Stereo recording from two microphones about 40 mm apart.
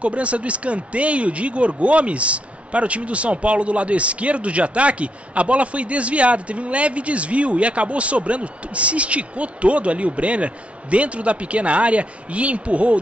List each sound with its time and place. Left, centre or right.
0.0 s speech: right